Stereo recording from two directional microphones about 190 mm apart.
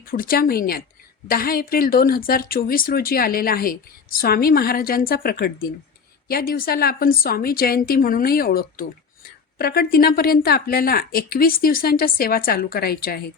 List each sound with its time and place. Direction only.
0.1 s a woman's voice: 50° left (ahead or behind)